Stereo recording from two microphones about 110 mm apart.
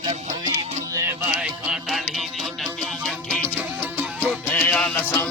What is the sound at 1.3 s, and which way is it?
Music, 5° right (ahead or behind).